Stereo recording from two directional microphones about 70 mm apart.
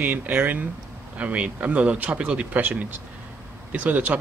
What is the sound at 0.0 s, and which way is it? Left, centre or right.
Speech, right.